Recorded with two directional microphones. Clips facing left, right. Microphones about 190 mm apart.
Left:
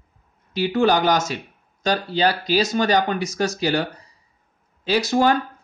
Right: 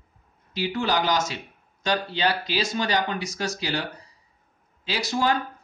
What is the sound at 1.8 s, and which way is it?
Speech, 40° left (ahead or behind).